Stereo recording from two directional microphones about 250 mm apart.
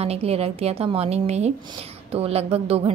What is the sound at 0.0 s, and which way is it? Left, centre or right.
A woman's voice, right.